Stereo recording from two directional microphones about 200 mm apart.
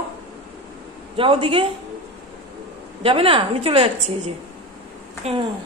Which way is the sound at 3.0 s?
25° right (ahead or behind).